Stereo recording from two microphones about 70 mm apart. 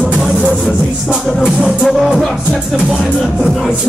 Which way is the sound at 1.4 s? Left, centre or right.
Centre.